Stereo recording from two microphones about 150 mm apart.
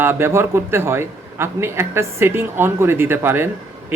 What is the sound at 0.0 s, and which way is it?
Speech, 15° right (ahead or behind).